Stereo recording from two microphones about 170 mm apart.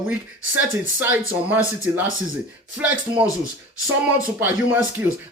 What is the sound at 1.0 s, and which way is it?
Speech, 10° right (ahead or behind).